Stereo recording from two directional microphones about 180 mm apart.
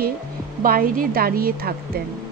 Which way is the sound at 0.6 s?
55° right (ahead or behind).